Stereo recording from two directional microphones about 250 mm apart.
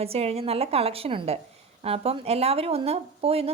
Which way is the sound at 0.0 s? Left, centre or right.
Right.